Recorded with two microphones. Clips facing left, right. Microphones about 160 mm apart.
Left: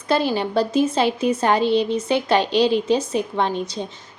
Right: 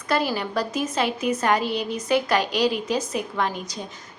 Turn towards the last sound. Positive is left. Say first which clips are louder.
# left 5 dB
turn(degrees=25)  # may be behind; listen again after turning